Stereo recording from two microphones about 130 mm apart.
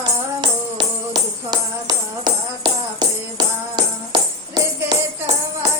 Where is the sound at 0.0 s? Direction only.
35° right (ahead or behind).